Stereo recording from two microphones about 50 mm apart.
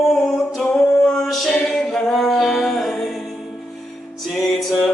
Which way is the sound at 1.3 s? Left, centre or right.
Centre.